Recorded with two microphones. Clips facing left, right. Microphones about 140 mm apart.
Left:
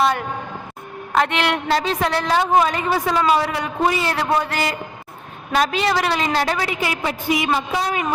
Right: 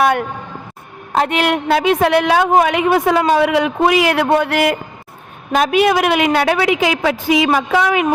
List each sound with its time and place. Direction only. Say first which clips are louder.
0.0 s a sound: right 4 dB; 55° right (ahead or behind)
1.7 s a woman's voice: right 9 dB; 60° right (ahead or behind)
3.5 s a woman's voice: right 7 dB; 75° right (ahead or behind)